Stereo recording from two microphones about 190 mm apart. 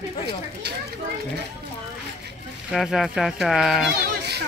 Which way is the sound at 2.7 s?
Centre (ahead or behind).